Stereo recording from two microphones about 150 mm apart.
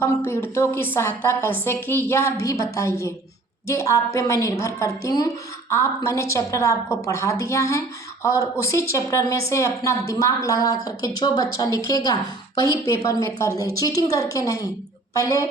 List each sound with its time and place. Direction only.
0.3 s a woman's voice: 15° left (ahead or behind)